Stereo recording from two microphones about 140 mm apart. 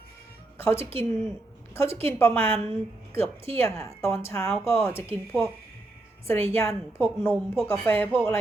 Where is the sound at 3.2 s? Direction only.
45° right (ahead or behind).